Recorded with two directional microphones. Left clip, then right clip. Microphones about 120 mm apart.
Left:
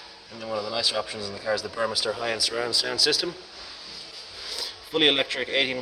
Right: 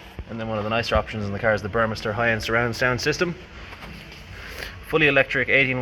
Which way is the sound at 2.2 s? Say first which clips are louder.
Right 5 dB; 10° left (ahead or behind).